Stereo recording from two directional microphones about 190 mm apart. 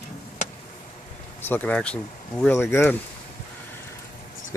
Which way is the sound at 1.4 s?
10° left (ahead or behind).